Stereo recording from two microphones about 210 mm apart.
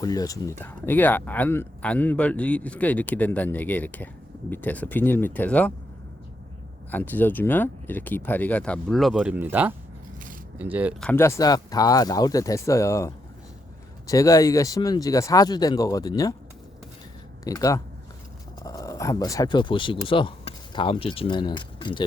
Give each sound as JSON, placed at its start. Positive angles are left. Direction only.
{"t": 0.0, "sound": "speech", "side_deg": 15}
{"t": 6.9, "sound": "speech", "side_deg": 10}
{"t": 11.0, "sound": "speech", "side_deg": 10}
{"t": 17.4, "sound": "speech", "side_deg": 15}